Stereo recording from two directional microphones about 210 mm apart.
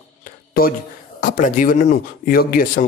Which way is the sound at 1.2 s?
40° left (ahead or behind).